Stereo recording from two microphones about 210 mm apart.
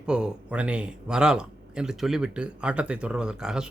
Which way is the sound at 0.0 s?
5° right (ahead or behind).